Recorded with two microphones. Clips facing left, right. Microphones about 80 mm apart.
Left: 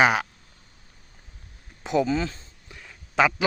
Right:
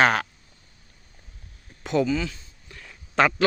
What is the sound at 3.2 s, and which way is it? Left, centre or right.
Speech, centre.